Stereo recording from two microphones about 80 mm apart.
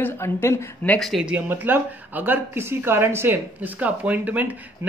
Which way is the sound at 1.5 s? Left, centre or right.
Right.